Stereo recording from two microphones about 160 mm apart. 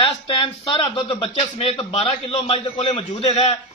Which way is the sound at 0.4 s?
35° left (ahead or behind).